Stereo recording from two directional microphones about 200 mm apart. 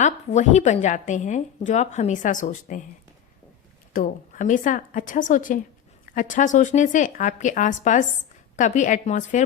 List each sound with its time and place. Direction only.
0.0 s speech: 35° left (ahead or behind)
3.9 s speech: 40° left (ahead or behind)